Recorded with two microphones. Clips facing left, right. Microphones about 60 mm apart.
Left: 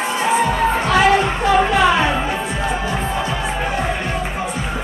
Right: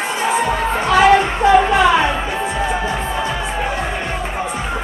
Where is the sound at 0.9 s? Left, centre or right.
Right.